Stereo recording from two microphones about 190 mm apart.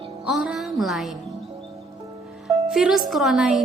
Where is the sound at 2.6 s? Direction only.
5° right (ahead or behind).